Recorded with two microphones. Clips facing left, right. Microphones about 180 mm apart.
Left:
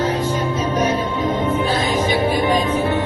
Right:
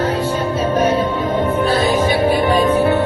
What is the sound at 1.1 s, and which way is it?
Music, 60° right (ahead or behind).